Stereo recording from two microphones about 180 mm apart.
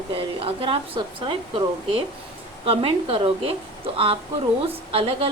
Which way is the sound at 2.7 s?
30° right (ahead or behind).